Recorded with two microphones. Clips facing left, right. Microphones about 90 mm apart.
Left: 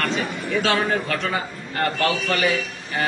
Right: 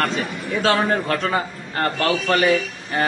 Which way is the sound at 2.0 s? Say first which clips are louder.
Right 5 dB; 35° right (ahead or behind).